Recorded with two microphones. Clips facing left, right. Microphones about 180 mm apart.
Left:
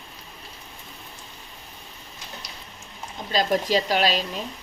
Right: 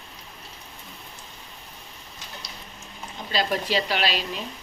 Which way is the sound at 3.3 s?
40° left (ahead or behind).